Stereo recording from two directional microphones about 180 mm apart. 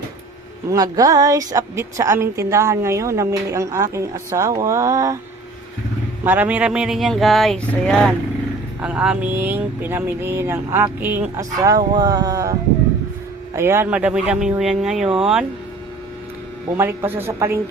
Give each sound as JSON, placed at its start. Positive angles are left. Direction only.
{"t": 0.7, "sound": "a woman's voice", "side_deg": -20}
{"t": 6.2, "sound": "a woman's voice", "side_deg": -10}
{"t": 11.9, "sound": "a sound", "side_deg": -20}
{"t": 13.5, "sound": "a woman's voice", "side_deg": -15}
{"t": 16.7, "sound": "a woman's voice", "side_deg": -15}